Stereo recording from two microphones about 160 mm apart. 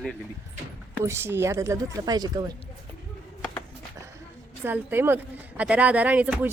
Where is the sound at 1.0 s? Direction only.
15° right (ahead or behind).